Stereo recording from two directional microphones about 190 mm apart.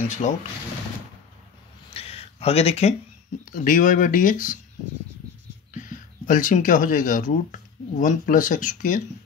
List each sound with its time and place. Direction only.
0.2 s speech: 40° left (ahead or behind)
2.0 s a sound: 30° left (ahead or behind)
3.5 s speech: 45° left (ahead or behind)
5.7 s speech: 45° left (ahead or behind)